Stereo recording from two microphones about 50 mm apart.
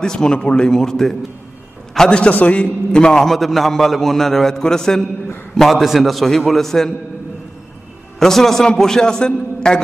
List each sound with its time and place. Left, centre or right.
0.0 s a man's voice: centre
2.0 s a man's voice: left; by 6.9 s centre
8.2 s a man's voice: centre